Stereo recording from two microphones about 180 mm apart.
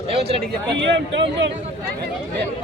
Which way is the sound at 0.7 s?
80° right.